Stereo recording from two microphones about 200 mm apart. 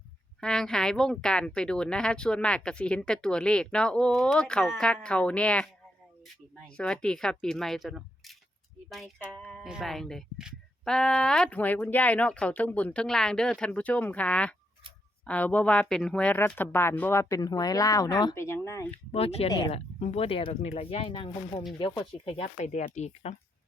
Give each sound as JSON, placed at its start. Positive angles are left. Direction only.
{"t": 0.3, "sound": "speech", "side_deg": 5}
{"t": 6.7, "sound": "speech", "side_deg": 5}
{"t": 18.9, "sound": "speech", "side_deg": 30}
{"t": 19.5, "sound": "speech", "side_deg": 20}
{"t": 19.7, "sound": "speech", "side_deg": 30}